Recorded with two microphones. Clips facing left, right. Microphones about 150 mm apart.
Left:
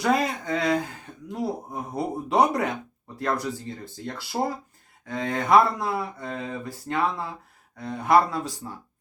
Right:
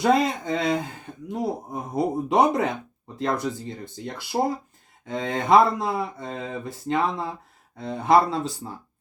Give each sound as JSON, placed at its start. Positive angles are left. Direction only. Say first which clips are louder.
{"t": 0.0, "sound": "speech", "louder": "right 3 dB", "side_deg": -25}